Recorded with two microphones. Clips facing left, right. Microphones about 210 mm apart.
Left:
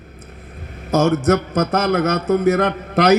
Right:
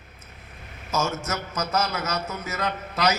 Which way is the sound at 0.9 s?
60° left (ahead or behind).